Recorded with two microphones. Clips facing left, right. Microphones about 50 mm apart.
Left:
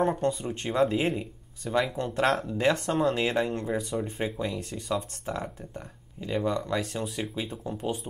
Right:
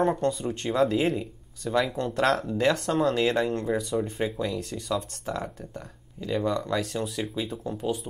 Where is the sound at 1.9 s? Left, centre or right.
Centre.